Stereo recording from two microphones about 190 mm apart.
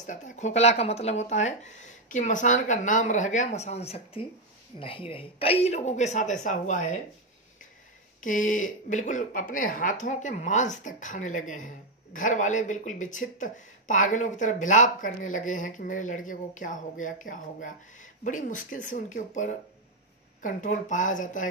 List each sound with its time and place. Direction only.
0.0 s speech: 40° left (ahead or behind)
8.2 s speech: 45° left (ahead or behind)